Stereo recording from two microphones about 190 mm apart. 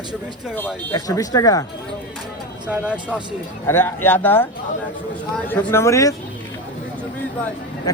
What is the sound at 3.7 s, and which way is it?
A man's voice, 10° left (ahead or behind).